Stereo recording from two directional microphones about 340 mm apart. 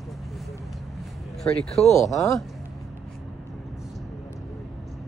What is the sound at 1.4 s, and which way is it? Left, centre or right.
Speech, centre.